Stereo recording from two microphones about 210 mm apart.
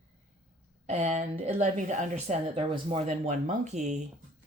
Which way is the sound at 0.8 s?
30° right (ahead or behind).